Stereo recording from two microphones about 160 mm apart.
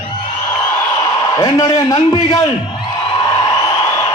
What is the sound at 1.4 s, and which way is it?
Speech, 20° left (ahead or behind).